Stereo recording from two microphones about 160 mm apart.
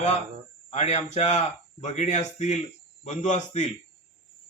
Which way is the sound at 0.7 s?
45° left (ahead or behind).